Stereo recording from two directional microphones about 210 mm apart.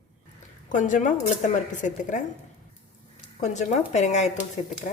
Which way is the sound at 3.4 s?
35° left (ahead or behind).